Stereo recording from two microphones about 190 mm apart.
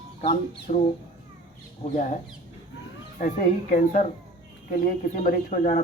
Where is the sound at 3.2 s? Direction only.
45° left (ahead or behind).